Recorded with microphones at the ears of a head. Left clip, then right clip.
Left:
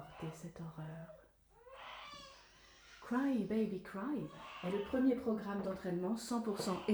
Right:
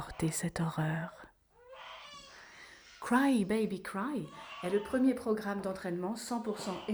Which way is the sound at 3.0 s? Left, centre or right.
Right.